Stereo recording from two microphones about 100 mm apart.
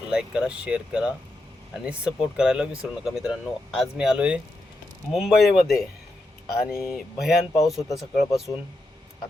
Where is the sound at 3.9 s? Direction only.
5° right (ahead or behind).